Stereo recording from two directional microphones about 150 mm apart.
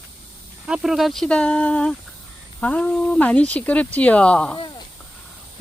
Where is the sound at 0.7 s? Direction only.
Centre (ahead or behind).